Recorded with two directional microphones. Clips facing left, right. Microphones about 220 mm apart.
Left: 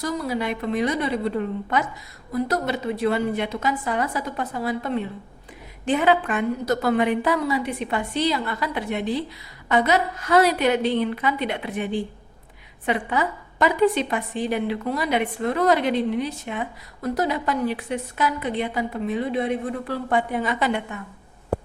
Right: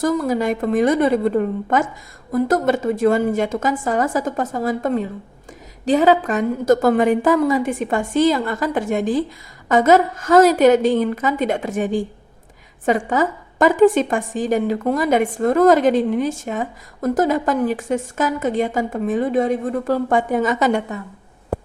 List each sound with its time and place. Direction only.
0.0 s a woman's voice: 50° right (ahead or behind)